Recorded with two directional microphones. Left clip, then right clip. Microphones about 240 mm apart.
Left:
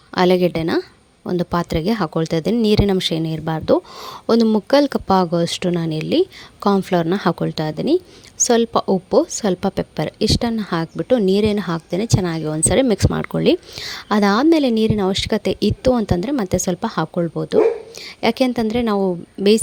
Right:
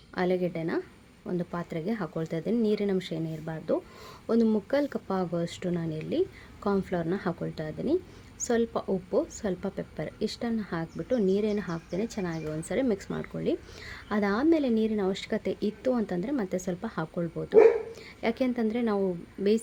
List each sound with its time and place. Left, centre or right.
0.1 s a woman's voice: left